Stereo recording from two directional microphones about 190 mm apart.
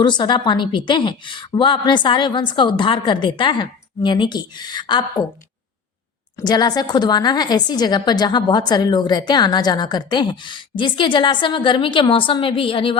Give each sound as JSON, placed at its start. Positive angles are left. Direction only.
{"t": 0.0, "sound": "a woman's voice", "side_deg": 25}
{"t": 6.4, "sound": "a woman's voice", "side_deg": 20}